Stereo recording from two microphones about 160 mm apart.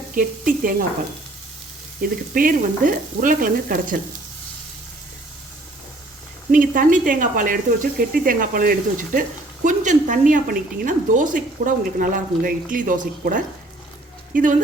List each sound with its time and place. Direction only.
0.1 s a woman's voice: 60° right (ahead or behind)
2.0 s a woman's voice: 60° right (ahead or behind)
6.5 s a woman's voice: 60° right (ahead or behind)